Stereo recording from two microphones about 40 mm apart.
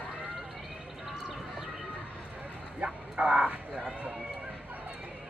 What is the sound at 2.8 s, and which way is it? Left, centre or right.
Vehicle, right.